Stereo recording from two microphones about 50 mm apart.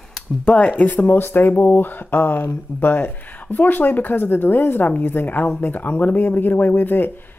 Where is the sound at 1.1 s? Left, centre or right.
Left.